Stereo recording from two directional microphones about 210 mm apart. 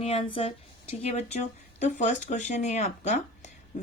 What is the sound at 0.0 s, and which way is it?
A woman's voice, 25° left (ahead or behind).